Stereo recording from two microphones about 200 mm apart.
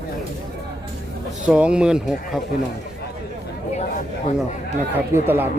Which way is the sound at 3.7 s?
35° left (ahead or behind).